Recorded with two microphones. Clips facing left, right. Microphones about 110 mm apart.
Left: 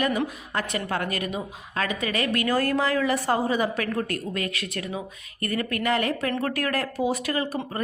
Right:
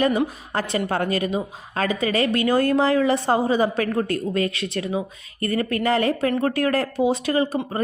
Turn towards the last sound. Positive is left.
turn(degrees=-25)  # may be behind; listen again after turning